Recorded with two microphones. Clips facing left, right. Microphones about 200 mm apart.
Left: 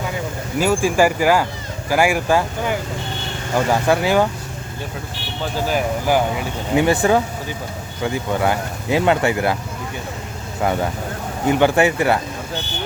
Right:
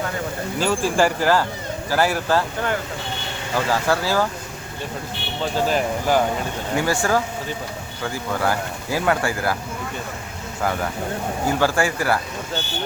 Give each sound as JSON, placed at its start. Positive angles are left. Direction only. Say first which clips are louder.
{"t": 0.6, "sound": "speech", "louder": "left 3 dB", "side_deg": 10}
{"t": 5.6, "sound": "speech", "louder": "left 3 dB", "side_deg": 5}
{"t": 6.7, "sound": "speech", "louder": "left 5 dB", "side_deg": 20}
{"t": 10.6, "sound": "speech", "louder": "left 3 dB", "side_deg": 25}